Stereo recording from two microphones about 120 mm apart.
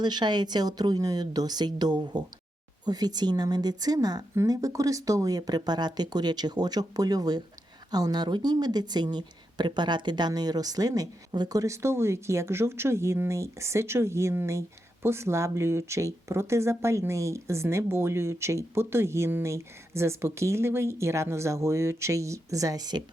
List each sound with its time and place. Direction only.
0.0 s a woman's voice: 35° right (ahead or behind)